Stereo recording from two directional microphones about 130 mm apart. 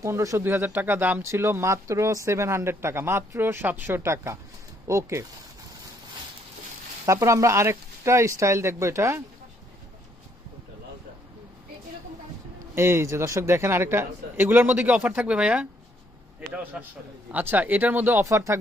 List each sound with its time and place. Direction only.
0.0 s speech: 25° right (ahead or behind)
7.0 s speech: 25° right (ahead or behind)
12.7 s a man's voice: 20° right (ahead or behind)
16.7 s a man's voice: 5° right (ahead or behind); by 18.6 s 25° right (ahead or behind)